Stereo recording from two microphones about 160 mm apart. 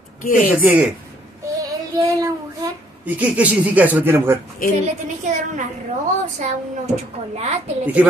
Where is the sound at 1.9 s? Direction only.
20° right (ahead or behind).